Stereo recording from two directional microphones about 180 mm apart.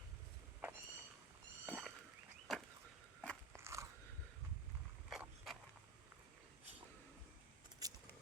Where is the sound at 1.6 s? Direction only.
Centre (ahead or behind).